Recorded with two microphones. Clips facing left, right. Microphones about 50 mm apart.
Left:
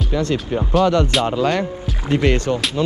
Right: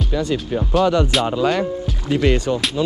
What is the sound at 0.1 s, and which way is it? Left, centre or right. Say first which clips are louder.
Speech: left 1 dB; centre.